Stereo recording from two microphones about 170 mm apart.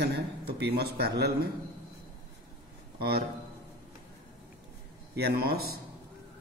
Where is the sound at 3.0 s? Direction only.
65° right (ahead or behind).